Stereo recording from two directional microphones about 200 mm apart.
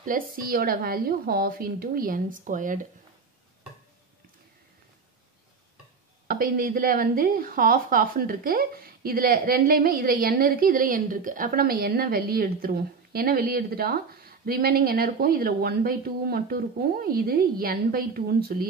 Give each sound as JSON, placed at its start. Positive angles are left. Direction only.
{"t": 0.0, "sound": "a woman's voice", "side_deg": -45}
{"t": 6.2, "sound": "a woman's voice", "side_deg": -45}